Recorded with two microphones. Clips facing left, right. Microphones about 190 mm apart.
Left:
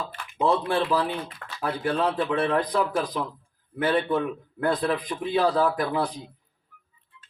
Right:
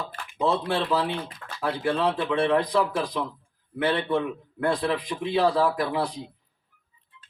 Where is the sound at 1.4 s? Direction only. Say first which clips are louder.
Even; 60° left (ahead or behind).